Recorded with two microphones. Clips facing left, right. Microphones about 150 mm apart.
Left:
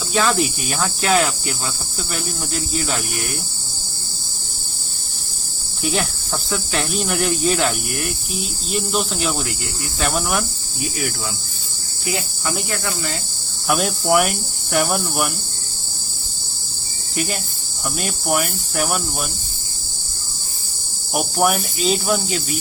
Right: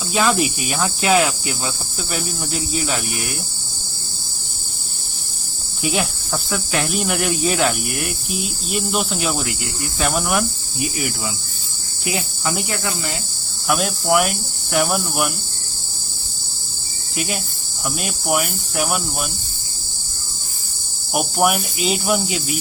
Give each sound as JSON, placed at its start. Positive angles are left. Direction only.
{"t": 0.3, "sound": "cricket", "side_deg": -5}
{"t": 2.7, "sound": "cricket", "side_deg": -5}
{"t": 5.8, "sound": "cricket", "side_deg": 0}
{"t": 12.0, "sound": "cricket", "side_deg": -20}
{"t": 13.7, "sound": "cricket", "side_deg": 0}
{"t": 18.0, "sound": "cricket", "side_deg": -5}
{"t": 21.1, "sound": "cricket", "side_deg": -5}